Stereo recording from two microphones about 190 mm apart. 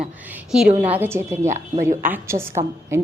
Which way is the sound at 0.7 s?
10° right (ahead or behind).